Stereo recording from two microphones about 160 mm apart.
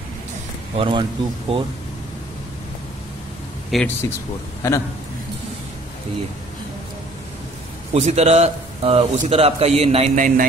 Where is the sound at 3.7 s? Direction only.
Centre (ahead or behind).